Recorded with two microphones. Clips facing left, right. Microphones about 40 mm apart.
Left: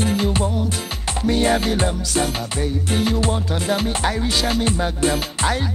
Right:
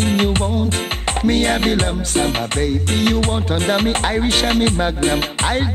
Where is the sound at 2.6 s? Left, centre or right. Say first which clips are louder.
Right 2 dB; right.